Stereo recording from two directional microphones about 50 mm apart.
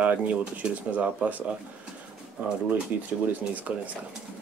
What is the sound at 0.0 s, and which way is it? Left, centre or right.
Speech, right.